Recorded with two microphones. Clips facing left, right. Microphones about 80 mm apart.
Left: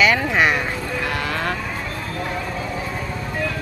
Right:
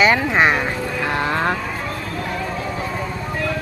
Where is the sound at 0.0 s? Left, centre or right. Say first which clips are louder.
Right 2 dB; right.